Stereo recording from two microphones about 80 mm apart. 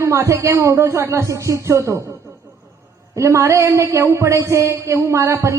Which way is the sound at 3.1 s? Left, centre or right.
Right.